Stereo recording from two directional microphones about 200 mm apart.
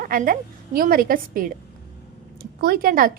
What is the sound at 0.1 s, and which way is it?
A woman's voice, 45° right (ahead or behind).